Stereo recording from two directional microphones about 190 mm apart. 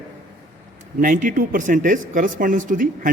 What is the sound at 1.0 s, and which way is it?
Speech, 45° right (ahead or behind).